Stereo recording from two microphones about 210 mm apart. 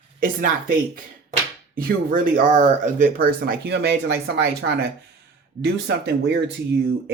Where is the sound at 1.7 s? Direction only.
40° right (ahead or behind).